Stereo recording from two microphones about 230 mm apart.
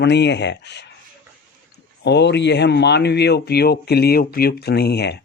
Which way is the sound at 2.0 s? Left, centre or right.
Left.